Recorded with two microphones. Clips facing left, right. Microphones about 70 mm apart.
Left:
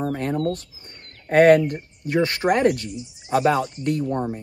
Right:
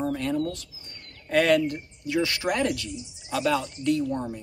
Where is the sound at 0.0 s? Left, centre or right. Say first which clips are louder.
Left 3 dB; left.